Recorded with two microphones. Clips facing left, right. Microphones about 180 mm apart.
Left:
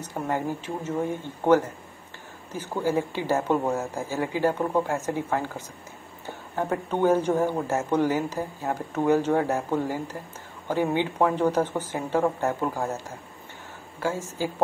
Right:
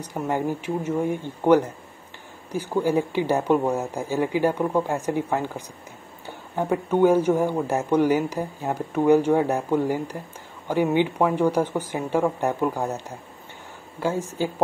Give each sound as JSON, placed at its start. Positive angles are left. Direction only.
{"t": 0.0, "sound": "a man's voice", "side_deg": -15}
{"t": 6.5, "sound": "a man's voice", "side_deg": -15}